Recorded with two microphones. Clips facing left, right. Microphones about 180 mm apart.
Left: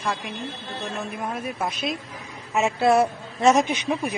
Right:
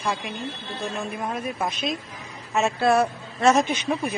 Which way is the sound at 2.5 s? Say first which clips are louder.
Left 1 dB; 20° left (ahead or behind).